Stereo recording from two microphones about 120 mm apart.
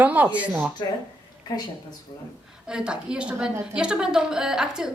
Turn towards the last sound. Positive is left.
turn(degrees=-5)  # may be behind; listen again after turning